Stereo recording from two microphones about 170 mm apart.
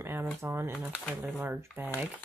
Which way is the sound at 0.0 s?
15° right (ahead or behind).